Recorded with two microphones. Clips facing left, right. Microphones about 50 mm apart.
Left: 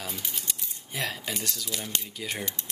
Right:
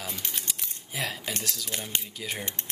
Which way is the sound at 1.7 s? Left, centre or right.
Right.